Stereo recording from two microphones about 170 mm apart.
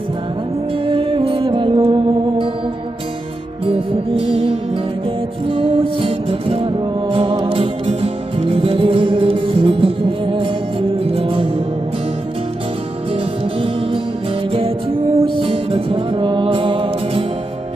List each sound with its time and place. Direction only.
0.9 s music: 30° right (ahead or behind)
3.7 s music: 30° right (ahead or behind)
13.1 s music: 30° right (ahead or behind)